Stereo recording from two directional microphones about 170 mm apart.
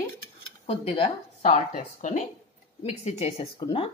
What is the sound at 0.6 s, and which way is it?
Speech, 30° left (ahead or behind).